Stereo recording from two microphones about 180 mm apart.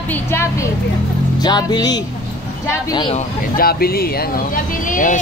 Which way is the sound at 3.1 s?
55° left (ahead or behind).